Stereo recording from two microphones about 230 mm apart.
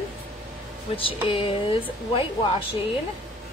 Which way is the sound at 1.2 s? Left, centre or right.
Left.